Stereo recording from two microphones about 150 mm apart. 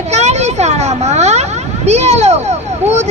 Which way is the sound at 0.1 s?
45° right (ahead or behind).